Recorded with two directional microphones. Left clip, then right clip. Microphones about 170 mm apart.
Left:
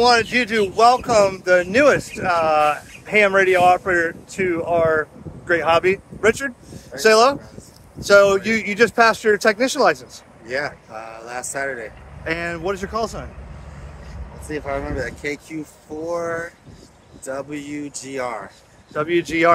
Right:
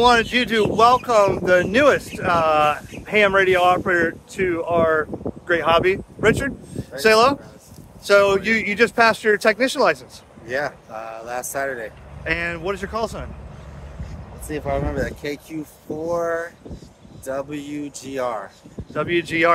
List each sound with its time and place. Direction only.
0.0 s speech: 10° left (ahead or behind); by 9.9 s 30° left (ahead or behind)
10.4 s speech: 15° right (ahead or behind)
12.3 s speech: 30° left (ahead or behind)
14.5 s speech: 25° right (ahead or behind)
18.9 s speech: 30° left (ahead or behind)